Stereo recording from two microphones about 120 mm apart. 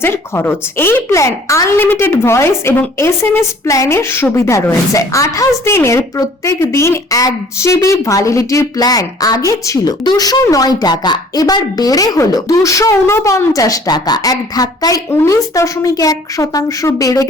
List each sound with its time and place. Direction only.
0.0 s a woman's voice: 20° left (ahead or behind)